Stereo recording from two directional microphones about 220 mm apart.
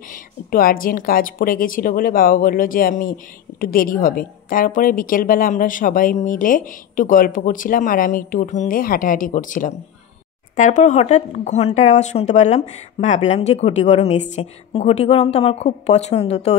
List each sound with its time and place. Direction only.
0.1 s a woman's voice: 40° left (ahead or behind)